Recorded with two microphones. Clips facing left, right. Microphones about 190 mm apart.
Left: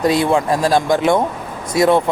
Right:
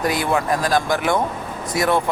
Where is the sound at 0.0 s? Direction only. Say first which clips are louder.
Left 5 dB; 25° left (ahead or behind).